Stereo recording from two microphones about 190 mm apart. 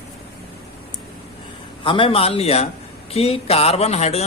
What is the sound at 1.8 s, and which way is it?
Speech, 25° left (ahead or behind).